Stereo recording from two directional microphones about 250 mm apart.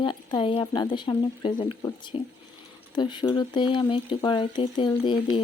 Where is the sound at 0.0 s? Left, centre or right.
Centre.